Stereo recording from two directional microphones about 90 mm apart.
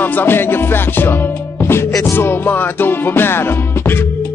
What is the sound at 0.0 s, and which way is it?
Music, 20° left (ahead or behind).